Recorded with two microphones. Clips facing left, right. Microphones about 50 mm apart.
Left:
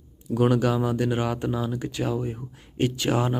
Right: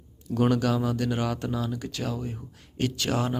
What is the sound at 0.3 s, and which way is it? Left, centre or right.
Speech, centre.